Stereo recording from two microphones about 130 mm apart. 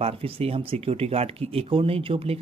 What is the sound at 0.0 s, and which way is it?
Speech, 50° right (ahead or behind).